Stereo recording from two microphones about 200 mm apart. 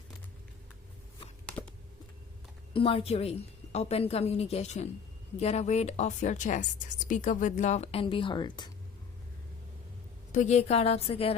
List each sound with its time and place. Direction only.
2.7 s a woman's voice: 25° left (ahead or behind)
10.3 s a woman's voice: 35° left (ahead or behind)